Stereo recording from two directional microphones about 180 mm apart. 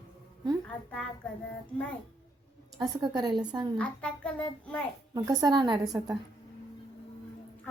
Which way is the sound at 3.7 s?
5° left (ahead or behind).